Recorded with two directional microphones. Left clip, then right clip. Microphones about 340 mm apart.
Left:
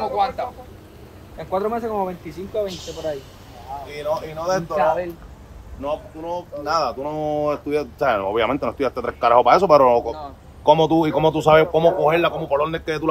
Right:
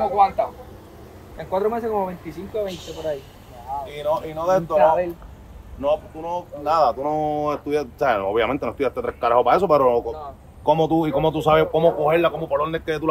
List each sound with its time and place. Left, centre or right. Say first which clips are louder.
1.4 s speech: even; centre
3.9 s speech: even; right
6.7 s speech: right 4 dB; centre